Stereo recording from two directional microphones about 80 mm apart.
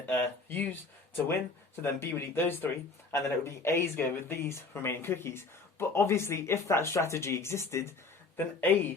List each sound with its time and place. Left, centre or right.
0.0 s speech: left